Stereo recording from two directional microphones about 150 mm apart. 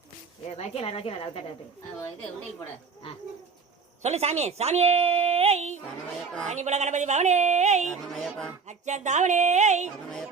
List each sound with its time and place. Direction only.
0.5 s a woman's voice: 45° left (ahead or behind)
4.0 s a woman's voice: 45° right (ahead or behind)
7.9 s a woman's voice: 5° left (ahead or behind)
8.6 s a woman's voice: 50° right (ahead or behind)